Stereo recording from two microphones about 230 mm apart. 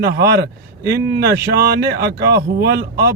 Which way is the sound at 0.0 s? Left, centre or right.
Right.